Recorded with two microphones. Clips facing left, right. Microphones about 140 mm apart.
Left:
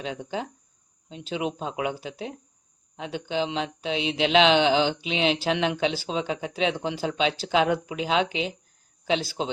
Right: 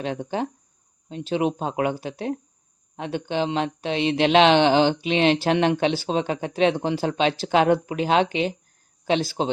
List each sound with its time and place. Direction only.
0.0 s speech: 50° right (ahead or behind)